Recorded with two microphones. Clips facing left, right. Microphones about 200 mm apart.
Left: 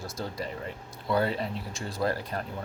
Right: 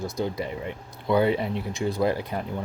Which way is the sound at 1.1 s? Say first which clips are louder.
Right 5 dB; 20° right (ahead or behind).